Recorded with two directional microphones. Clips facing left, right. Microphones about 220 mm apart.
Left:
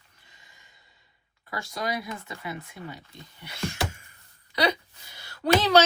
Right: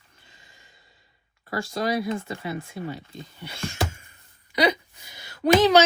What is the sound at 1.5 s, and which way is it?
Speech, 30° right (ahead or behind).